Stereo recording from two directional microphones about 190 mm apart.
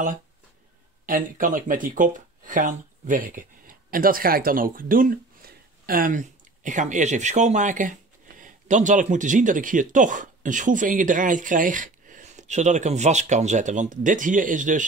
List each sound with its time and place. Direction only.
1.0 s speech: 45° right (ahead or behind)